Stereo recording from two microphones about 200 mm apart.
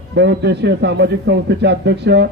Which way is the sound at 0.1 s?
60° right (ahead or behind).